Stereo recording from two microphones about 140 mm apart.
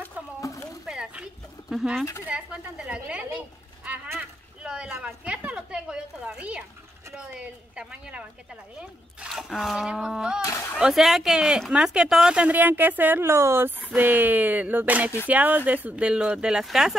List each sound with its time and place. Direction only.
0.4 s a sound: 20° left (ahead or behind)
0.8 s a sound: 5° right (ahead or behind)
2.2 s speech: 10° right (ahead or behind)
4.1 s boat: 5° right (ahead or behind)
5.0 s speech: 10° right (ahead or behind)
10.4 s speech: 25° left (ahead or behind)
10.8 s speech: centre (ahead or behind)